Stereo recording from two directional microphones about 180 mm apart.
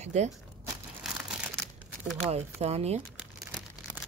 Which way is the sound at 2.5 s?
35° right (ahead or behind).